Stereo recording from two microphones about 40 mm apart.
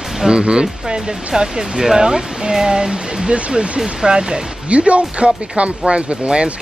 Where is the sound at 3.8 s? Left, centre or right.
Centre.